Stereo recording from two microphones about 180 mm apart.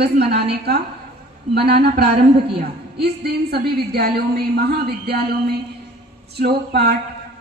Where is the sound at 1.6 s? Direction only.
60° right (ahead or behind).